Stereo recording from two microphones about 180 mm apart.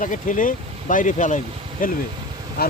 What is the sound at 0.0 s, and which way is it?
Speech, 45° left (ahead or behind).